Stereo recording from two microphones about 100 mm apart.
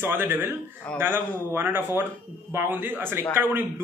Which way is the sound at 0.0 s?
20° right (ahead or behind).